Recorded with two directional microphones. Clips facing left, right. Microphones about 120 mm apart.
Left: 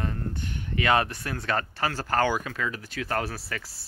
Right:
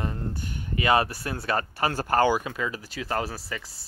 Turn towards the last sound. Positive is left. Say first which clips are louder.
# even
turn(degrees=0)  # may be behind; listen again after turning